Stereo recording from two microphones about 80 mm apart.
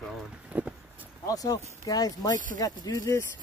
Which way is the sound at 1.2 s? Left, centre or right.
Left.